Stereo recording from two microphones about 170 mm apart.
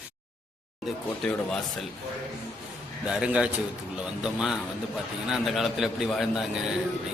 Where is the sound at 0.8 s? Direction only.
Centre (ahead or behind).